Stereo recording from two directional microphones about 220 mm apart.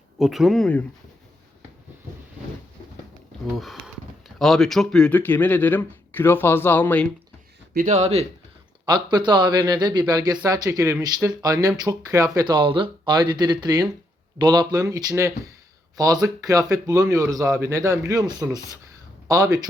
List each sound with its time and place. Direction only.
0.2 s speech: centre (ahead or behind)
3.4 s speech: centre (ahead or behind)
7.7 s a man's voice: 35° right (ahead or behind); by 19.6 s 15° right (ahead or behind)